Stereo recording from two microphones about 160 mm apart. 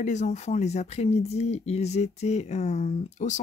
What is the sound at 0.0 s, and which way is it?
Speech, 50° left (ahead or behind).